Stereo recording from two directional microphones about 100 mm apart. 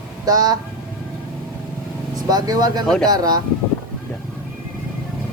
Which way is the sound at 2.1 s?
40° right (ahead or behind).